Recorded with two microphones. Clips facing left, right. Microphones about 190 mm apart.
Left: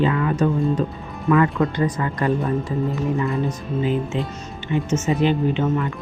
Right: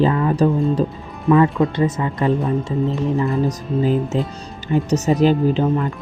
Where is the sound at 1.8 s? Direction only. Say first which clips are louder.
Right 3 dB; 20° right (ahead or behind).